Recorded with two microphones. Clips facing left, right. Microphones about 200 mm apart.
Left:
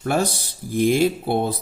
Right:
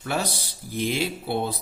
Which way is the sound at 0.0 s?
50° left (ahead or behind).